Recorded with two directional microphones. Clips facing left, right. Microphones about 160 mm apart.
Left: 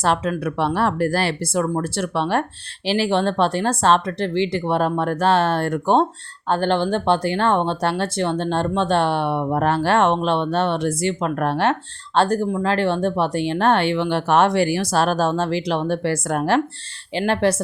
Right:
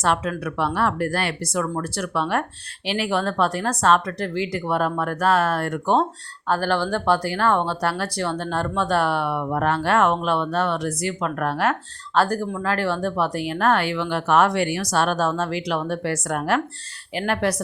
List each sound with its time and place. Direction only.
0.0 s speech: 30° left (ahead or behind)